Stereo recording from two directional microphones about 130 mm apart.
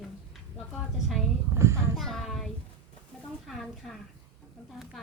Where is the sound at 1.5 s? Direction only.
20° right (ahead or behind).